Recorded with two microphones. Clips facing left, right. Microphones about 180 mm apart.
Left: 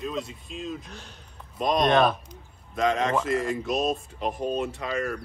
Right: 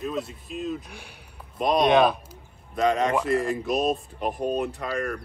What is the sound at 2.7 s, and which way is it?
Speech, centre (ahead or behind).